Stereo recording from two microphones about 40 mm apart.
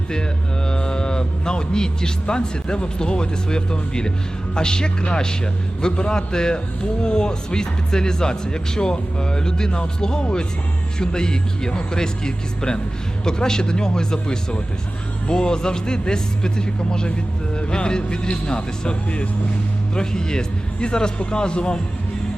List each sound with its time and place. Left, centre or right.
0.7 s speech: left